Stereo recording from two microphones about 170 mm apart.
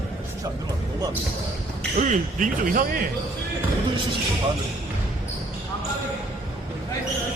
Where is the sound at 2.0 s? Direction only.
50° right (ahead or behind).